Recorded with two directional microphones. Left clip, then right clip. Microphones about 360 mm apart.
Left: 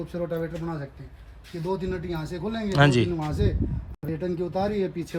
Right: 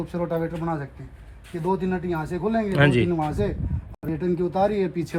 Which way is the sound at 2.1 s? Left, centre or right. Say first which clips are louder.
Right 6 dB; centre.